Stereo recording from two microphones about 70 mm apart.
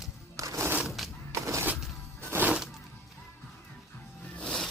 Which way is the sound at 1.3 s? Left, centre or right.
Right.